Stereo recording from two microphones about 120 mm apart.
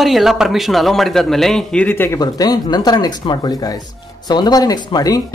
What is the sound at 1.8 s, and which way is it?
Speech, 20° left (ahead or behind).